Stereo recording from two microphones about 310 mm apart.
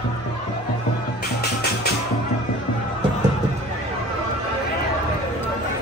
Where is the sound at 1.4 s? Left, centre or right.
Left.